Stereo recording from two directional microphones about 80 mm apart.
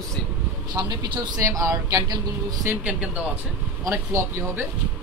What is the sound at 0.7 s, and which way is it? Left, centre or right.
Speech, right.